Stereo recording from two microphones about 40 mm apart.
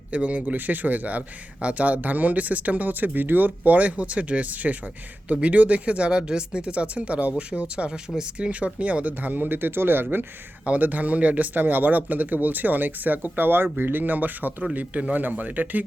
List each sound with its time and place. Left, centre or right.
0.1 s speech: right
7.8 s speech: right
8.4 s speech: right
10.8 s speech: right
14.6 s speech: right
15.1 s speech: right